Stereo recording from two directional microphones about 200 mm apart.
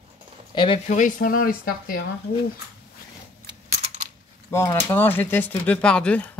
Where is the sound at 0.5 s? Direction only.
25° left (ahead or behind).